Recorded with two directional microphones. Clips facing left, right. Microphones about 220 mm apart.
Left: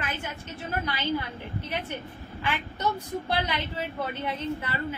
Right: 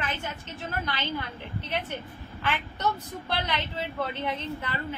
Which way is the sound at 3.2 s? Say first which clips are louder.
Even; 10° left (ahead or behind).